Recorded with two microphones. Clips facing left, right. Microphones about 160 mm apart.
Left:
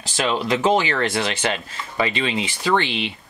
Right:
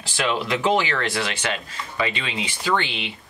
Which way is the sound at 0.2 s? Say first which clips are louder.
Left 3 dB; 30° left (ahead or behind).